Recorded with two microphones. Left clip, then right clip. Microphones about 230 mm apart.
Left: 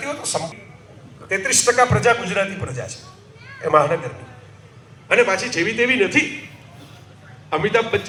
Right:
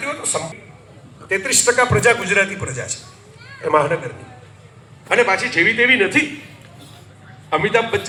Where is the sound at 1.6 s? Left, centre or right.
Centre.